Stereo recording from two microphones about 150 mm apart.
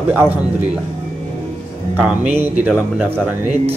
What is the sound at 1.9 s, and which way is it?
Speech, 15° right (ahead or behind).